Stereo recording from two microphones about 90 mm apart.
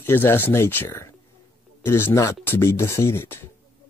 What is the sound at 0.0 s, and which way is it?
Speech, 25° left (ahead or behind).